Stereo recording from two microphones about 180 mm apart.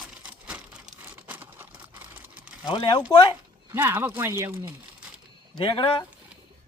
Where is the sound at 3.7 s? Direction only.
10° right (ahead or behind).